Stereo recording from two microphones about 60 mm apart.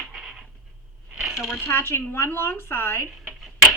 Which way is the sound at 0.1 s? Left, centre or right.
Centre.